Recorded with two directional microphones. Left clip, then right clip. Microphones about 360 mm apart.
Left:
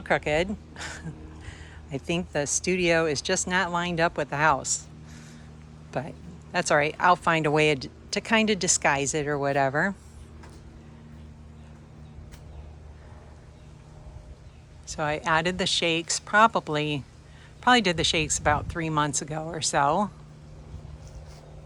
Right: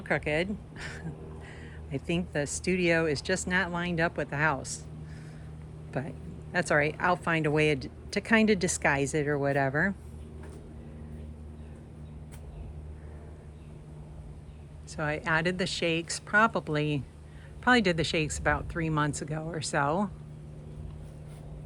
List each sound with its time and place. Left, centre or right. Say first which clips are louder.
0.0 s speech: left 5 dB; centre
14.8 s speech: left 4 dB; centre